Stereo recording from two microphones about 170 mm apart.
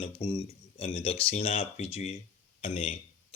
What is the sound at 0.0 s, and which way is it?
Speech, 35° left (ahead or behind).